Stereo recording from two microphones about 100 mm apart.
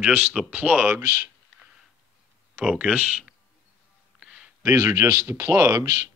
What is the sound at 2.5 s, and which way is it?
Speech, 10° right (ahead or behind).